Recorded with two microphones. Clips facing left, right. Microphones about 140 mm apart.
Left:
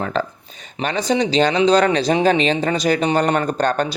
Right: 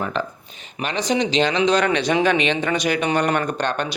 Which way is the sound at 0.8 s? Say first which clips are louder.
Left 2 dB; 35° left (ahead or behind).